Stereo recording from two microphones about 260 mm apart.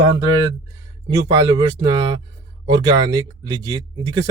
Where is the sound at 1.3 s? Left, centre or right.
Centre.